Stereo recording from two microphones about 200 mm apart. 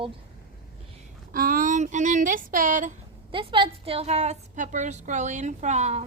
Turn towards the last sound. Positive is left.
turn(degrees=-35)  # may be behind; listen again after turning